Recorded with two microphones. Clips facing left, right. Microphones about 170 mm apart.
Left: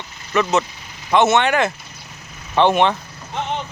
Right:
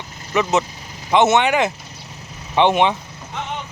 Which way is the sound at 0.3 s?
20° right (ahead or behind).